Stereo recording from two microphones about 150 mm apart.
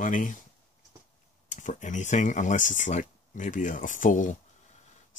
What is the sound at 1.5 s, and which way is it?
Speech, 55° left (ahead or behind).